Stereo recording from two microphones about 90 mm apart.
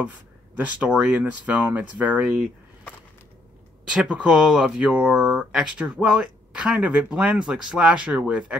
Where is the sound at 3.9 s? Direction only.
10° right (ahead or behind).